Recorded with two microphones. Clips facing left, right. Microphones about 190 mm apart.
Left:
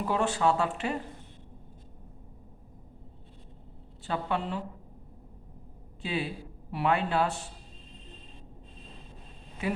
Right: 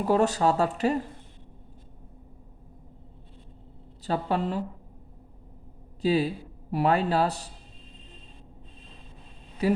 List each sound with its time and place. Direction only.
0.1 s a man's voice: 40° right (ahead or behind)
4.0 s a man's voice: 40° right (ahead or behind)
6.0 s a man's voice: 40° right (ahead or behind)